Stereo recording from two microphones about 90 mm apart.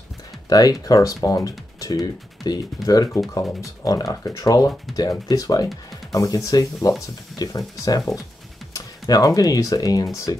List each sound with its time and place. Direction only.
0.5 s speech: 45° left (ahead or behind)
4.9 s speech: centre (ahead or behind)
5.3 s speech: 40° left (ahead or behind)